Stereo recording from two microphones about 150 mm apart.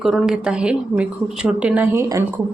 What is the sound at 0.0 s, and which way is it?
A woman's voice, centre (ahead or behind).